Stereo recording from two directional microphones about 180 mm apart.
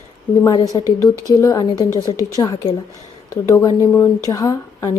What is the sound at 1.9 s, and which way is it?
Speech, 20° right (ahead or behind).